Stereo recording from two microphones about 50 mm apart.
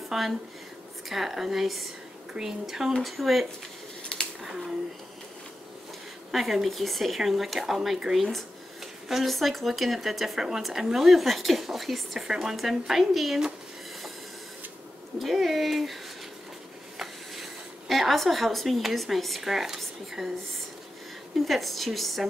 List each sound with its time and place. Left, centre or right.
0.1 s speech: centre
4.0 s a sound: centre
6.3 s speech: centre
15.1 s speech: centre
21.5 s speech: centre